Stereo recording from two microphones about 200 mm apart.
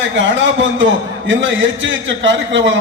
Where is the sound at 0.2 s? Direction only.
65° right (ahead or behind).